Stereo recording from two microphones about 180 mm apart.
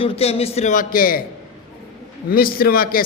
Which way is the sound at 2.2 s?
55° left (ahead or behind).